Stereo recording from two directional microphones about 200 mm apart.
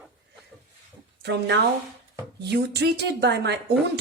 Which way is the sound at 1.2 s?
60° right (ahead or behind).